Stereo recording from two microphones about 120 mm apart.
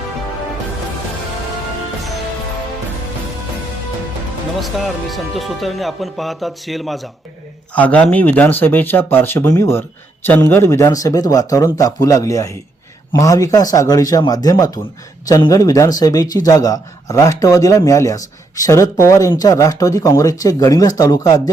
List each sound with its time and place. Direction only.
4.6 s speech: centre (ahead or behind)
7.8 s a man's voice: 15° left (ahead or behind); by 21.5 s 30° left (ahead or behind)